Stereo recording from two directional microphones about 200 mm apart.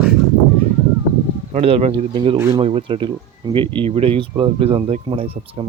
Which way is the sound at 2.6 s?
25° right (ahead or behind).